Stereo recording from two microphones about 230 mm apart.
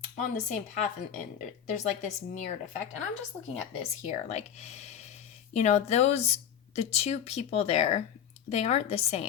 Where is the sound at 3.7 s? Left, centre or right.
Left.